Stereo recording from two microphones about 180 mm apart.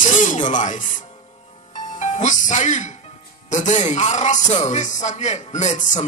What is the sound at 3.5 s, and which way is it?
Speech, 40° left (ahead or behind).